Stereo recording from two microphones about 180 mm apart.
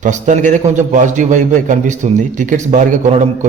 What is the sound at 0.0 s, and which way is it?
A man's voice, 45° right (ahead or behind).